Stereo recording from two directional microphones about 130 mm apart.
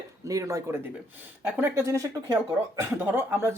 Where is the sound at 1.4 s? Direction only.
10° right (ahead or behind).